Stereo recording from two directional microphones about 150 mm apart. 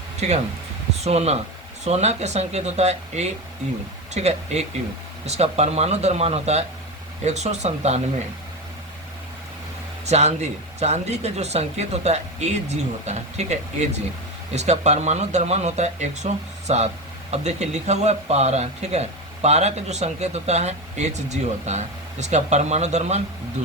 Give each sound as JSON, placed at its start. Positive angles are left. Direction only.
{"t": 1.0, "sound": "speech", "side_deg": -45}
{"t": 10.1, "sound": "speech", "side_deg": -50}